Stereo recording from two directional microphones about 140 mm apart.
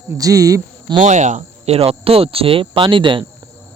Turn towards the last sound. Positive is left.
turn(degrees=-35)  # may be behind; listen again after turning